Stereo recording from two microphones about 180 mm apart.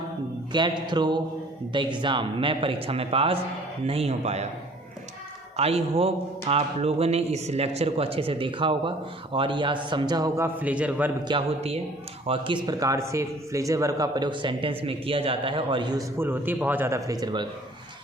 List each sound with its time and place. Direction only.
0.5 s a man's voice: 25° right (ahead or behind)
5.5 s a man's voice: 35° right (ahead or behind); by 11.1 s 5° right (ahead or behind)
11.3 s a man's voice: 30° right (ahead or behind)
12.6 s a man's voice: 20° right (ahead or behind)